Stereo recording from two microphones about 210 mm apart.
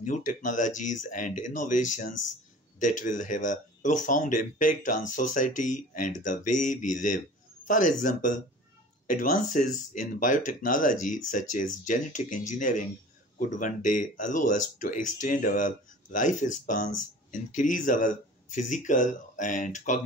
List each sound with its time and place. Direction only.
0.0 s speech: 40° left (ahead or behind)